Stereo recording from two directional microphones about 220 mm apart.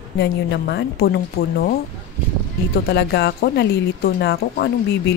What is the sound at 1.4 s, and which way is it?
Speech, 30° left (ahead or behind).